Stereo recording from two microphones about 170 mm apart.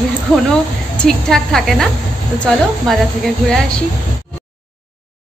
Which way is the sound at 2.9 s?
Centre (ahead or behind).